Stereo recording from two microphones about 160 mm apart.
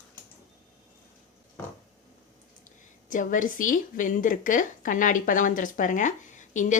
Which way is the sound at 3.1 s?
55° left (ahead or behind).